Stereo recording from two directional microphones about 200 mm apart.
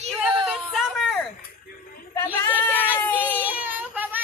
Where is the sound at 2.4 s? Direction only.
10° left (ahead or behind).